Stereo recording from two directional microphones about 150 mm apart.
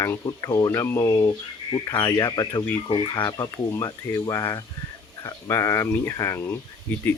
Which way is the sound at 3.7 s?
20° left (ahead or behind).